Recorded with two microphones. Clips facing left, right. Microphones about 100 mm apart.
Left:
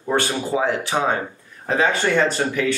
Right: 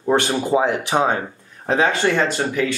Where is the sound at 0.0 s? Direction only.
20° right (ahead or behind).